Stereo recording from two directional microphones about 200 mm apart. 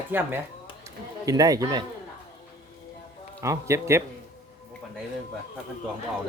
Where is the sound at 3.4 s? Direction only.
15° right (ahead or behind).